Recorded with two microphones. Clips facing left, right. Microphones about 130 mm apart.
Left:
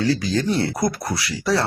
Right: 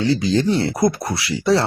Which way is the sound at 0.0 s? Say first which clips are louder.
Right 3 dB; 25° right (ahead or behind).